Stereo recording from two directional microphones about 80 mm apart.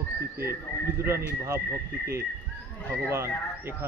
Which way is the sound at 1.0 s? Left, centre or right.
Right.